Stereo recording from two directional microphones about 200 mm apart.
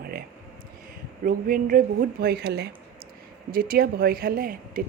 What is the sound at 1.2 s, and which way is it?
A woman's voice, 45° right (ahead or behind).